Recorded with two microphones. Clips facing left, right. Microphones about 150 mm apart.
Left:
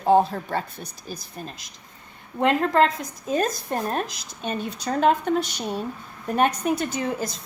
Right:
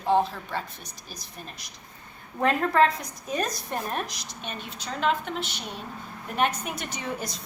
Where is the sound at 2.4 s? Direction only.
20° left (ahead or behind).